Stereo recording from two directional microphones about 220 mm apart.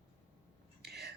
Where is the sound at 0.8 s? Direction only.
45° right (ahead or behind).